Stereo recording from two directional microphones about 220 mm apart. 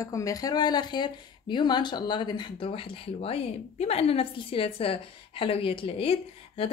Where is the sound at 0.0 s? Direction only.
15° left (ahead or behind).